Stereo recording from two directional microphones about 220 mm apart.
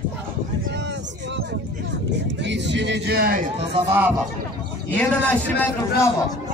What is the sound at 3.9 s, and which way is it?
Speech, 5° right (ahead or behind).